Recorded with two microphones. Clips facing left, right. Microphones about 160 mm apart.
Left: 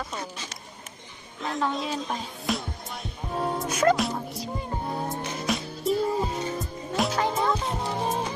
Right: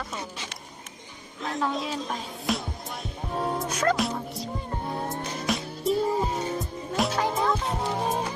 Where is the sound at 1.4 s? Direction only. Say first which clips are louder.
Left 1 dB; centre (ahead or behind).